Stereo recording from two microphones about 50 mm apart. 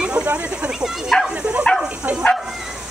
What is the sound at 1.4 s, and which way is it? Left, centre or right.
Bow-wow, right.